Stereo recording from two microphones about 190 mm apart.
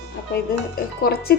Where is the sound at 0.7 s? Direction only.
55° left (ahead or behind).